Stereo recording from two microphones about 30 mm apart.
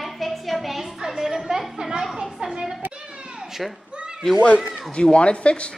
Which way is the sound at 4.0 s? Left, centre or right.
Right.